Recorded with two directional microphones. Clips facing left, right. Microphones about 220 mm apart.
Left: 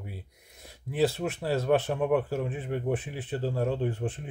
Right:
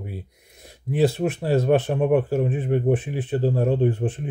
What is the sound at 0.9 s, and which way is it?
Speech, 15° right (ahead or behind).